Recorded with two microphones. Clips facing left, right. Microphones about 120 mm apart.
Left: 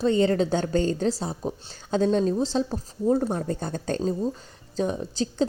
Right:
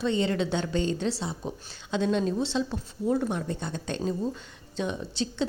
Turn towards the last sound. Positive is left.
turn(degrees=40)  # may be behind; listen again after turning